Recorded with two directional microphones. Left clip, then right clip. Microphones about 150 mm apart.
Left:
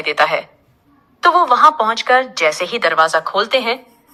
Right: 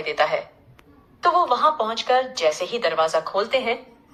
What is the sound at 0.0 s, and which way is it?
A woman's voice, 25° left (ahead or behind).